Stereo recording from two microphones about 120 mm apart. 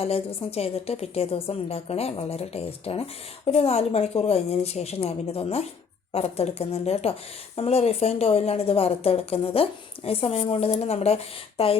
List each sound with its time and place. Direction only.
0.0 s a woman's voice: 55° left (ahead or behind)